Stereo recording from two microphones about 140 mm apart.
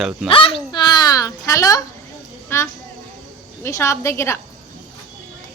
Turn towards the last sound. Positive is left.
turn(degrees=20)  # may be behind; listen again after turning